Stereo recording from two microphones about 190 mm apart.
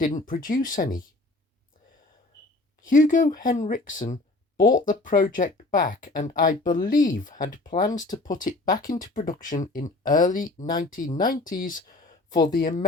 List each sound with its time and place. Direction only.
0.0 s speech: 45° left (ahead or behind)
2.8 s speech: 45° left (ahead or behind)